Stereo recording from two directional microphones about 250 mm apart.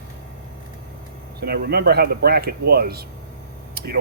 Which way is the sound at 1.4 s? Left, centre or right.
Right.